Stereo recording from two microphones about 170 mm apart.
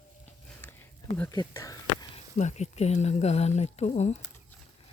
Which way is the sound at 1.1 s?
10° left (ahead or behind).